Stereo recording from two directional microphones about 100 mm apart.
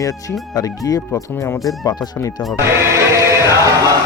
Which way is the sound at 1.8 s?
40° left (ahead or behind).